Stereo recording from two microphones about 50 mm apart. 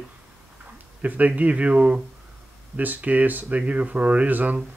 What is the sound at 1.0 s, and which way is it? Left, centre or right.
Speech, right.